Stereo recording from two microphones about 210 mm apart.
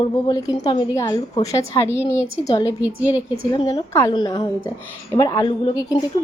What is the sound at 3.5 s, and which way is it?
A woman's voice, 20° left (ahead or behind).